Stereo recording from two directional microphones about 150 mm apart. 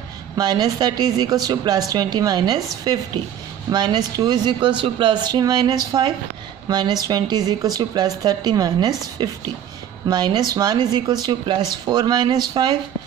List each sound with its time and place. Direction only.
0.4 s a woman's voice: 25° right (ahead or behind)